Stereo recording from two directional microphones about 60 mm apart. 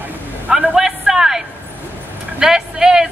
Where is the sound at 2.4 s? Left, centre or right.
Centre.